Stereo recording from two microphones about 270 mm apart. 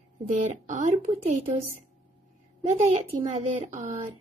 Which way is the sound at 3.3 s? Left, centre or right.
Right.